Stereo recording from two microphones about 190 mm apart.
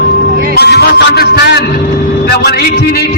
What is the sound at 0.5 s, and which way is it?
Music, 60° left (ahead or behind).